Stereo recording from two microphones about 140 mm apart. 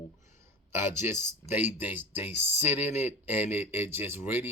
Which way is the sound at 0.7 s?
15° right (ahead or behind).